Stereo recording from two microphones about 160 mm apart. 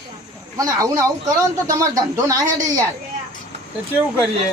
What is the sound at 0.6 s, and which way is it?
Speech, 20° right (ahead or behind).